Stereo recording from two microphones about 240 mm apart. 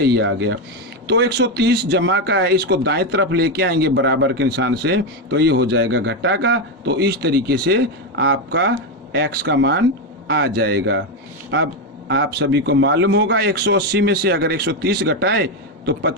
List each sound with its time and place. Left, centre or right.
0.0 s a man's voice: right